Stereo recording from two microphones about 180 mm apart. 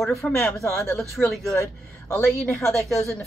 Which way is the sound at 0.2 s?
10° left (ahead or behind).